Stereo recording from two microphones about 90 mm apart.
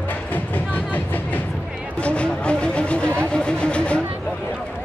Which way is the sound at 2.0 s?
15° left (ahead or behind).